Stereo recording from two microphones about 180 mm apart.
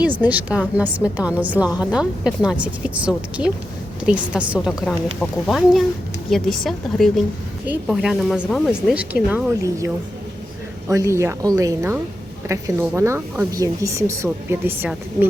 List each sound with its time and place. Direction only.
0.2 s a woman's voice: 10° right (ahead or behind)
9.6 s a woman's voice: 15° right (ahead or behind)